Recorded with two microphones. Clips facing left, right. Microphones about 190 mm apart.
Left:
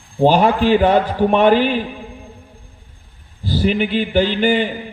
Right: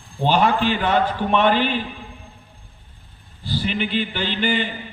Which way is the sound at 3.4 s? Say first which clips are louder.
Left 7 dB; 45° left (ahead or behind).